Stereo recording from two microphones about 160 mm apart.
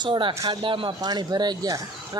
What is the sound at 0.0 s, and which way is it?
Speech, 30° right (ahead or behind).